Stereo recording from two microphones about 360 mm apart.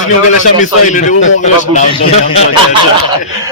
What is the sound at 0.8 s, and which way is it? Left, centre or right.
A man's voice, left.